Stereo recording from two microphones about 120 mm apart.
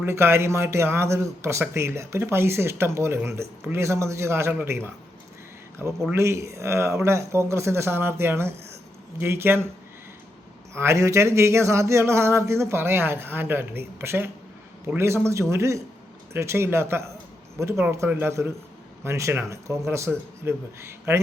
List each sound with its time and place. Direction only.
0.0 s speech: 20° right (ahead or behind)
6.1 s speech: 25° right (ahead or behind)
10.8 s speech: 25° right (ahead or behind)